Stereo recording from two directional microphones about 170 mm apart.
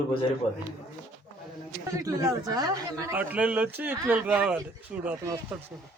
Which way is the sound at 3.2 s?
10° right (ahead or behind).